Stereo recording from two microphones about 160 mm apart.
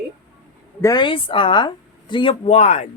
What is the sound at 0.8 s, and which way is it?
A woman's voice, 25° left (ahead or behind).